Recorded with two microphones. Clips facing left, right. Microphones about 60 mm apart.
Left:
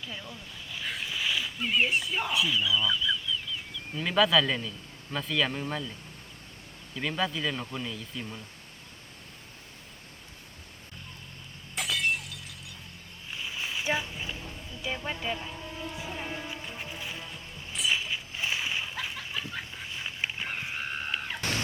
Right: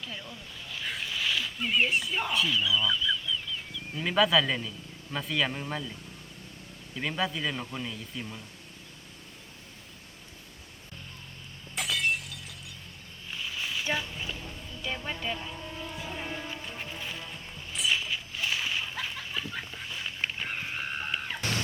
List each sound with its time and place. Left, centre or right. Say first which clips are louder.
0.0 s speech: even; centre
6.9 s speech: left 1 dB; centre
11.7 s shatter: even; centre
13.3 s a sound: even; centre
14.4 s vehicle: left 1 dB; centre
18.3 s splash: even; left
18.9 s a sound: even; centre